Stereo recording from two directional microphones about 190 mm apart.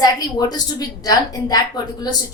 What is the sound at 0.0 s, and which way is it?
A woman's voice, 20° left (ahead or behind).